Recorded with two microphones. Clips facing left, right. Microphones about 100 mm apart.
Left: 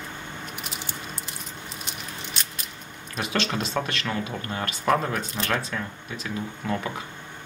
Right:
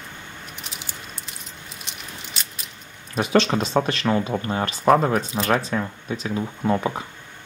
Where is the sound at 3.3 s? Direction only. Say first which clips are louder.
Right 8 dB; 35° right (ahead or behind).